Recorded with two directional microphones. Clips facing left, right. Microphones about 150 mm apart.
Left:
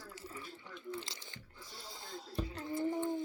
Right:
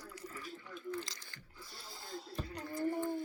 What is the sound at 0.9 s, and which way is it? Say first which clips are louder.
Chewing: right 2 dB; 25° left (ahead or behind).